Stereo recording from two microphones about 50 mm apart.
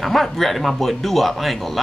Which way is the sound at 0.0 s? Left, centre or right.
Centre.